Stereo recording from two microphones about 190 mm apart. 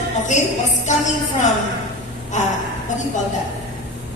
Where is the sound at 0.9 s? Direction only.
40° left (ahead or behind).